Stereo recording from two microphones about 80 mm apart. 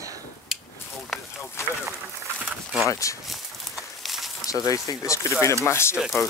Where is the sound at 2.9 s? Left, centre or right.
Left.